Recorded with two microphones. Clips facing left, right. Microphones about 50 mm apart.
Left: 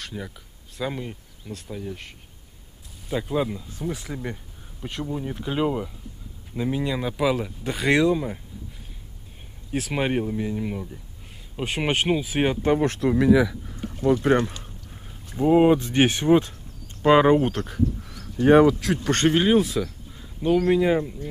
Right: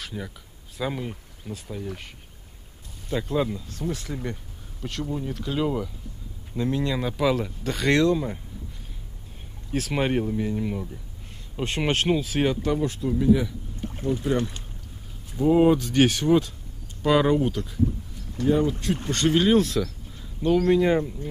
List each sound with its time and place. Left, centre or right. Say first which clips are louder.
0.0 s a sound: even; centre
0.7 s speech: even; centre
3.1 s speech: even; centre
5.3 s speech: left 2 dB; left
9.7 s speech: even; centre
12.6 s speech: left 4 dB; left
15.3 s speech: left 1 dB; left
17.5 s speech: left 1 dB; left
19.3 s speech: even; centre
20.8 s speech: even; centre